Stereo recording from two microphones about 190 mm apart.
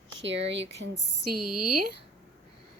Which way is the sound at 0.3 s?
70° right (ahead or behind).